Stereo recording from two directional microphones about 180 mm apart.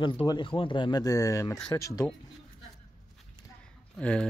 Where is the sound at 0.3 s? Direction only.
25° left (ahead or behind).